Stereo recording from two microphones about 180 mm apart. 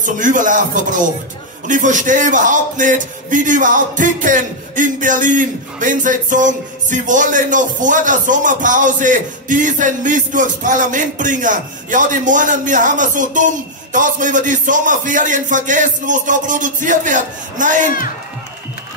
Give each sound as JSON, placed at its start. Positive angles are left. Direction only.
{"t": 0.0, "sound": "speech", "side_deg": -45}